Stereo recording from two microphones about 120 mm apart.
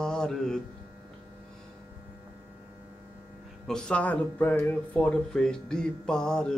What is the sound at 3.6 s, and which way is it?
Speech, 5° left (ahead or behind).